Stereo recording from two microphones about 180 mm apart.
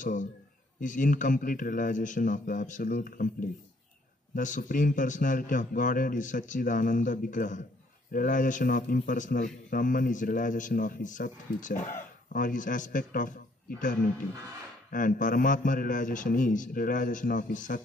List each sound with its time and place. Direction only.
0.0 s a man's voice: 45° left (ahead or behind)
14.9 s a man's voice: 45° left (ahead or behind)